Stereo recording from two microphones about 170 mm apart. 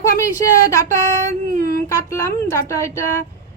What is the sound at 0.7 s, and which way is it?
A woman's voice, 15° left (ahead or behind).